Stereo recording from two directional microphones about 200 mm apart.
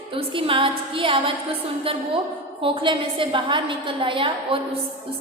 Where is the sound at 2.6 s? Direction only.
25° right (ahead or behind).